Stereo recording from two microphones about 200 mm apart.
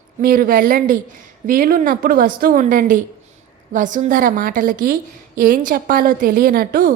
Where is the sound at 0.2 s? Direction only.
45° right (ahead or behind).